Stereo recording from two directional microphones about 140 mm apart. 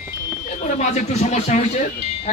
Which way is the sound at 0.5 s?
60° left (ahead or behind).